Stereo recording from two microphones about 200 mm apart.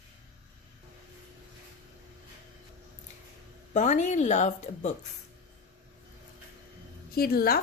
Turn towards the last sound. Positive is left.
turn(degrees=50)  # may be behind; listen again after turning